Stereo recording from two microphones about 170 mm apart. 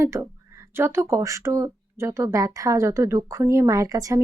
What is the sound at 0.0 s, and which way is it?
Speech, 15° right (ahead or behind).